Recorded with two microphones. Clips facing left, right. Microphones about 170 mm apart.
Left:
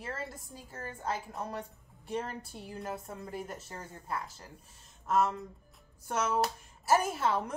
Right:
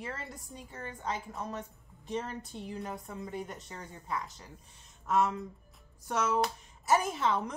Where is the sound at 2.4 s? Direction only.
5° left (ahead or behind).